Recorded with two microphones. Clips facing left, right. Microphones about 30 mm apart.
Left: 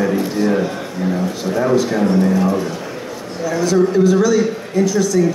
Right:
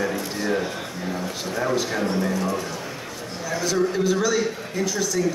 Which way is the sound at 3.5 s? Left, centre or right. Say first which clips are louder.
Left 8 dB; centre.